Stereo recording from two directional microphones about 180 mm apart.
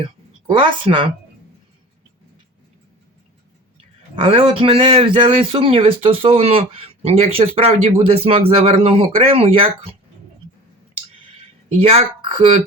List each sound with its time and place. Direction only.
0.5 s a woman's voice: 30° right (ahead or behind)
4.1 s a man's voice: 30° right (ahead or behind)
11.8 s a man's voice: 35° right (ahead or behind)